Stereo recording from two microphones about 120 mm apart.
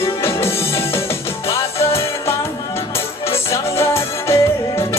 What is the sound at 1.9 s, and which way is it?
Music, 20° left (ahead or behind).